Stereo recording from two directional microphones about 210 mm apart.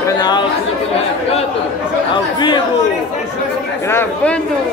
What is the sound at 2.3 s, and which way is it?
Chatter, 20° left (ahead or behind).